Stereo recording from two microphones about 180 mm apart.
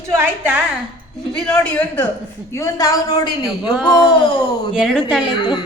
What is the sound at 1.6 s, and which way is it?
A woman's voice, 10° left (ahead or behind).